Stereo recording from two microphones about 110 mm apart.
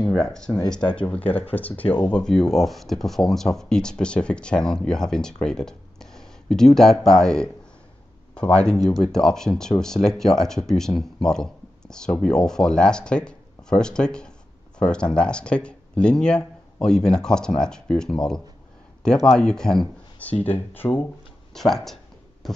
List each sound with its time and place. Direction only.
0.0 s speech: 5° left (ahead or behind)
21.5 s speech: 5° left (ahead or behind)